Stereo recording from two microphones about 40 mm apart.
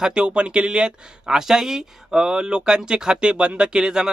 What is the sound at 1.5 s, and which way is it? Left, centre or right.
Speech, centre.